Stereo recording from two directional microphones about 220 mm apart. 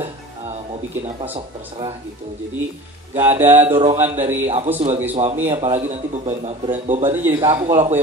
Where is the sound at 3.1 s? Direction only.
10° right (ahead or behind).